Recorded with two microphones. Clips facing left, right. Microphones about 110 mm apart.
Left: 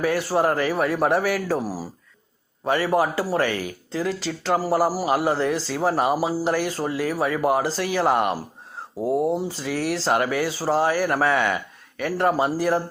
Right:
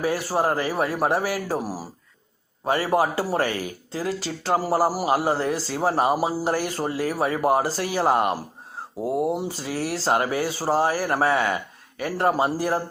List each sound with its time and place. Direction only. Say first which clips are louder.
0.3 s speech: left 2 dB; 30° right (ahead or behind)
1.5 s speech: left 1 dB; 10° right (ahead or behind)
2.6 s speech: left 1 dB; 30° right (ahead or behind)
5.1 s speech: left 1 dB; 35° right (ahead or behind)
5.9 s speech: right 1 dB; 25° right (ahead or behind)
6.4 s speech: left 1 dB; 40° right (ahead or behind)
9.0 s speech: left 2 dB; 5° right (ahead or behind)
9.6 s speech: left 2 dB; 35° right (ahead or behind)